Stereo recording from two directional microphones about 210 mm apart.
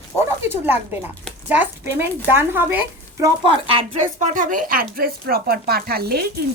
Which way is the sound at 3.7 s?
30° right (ahead or behind).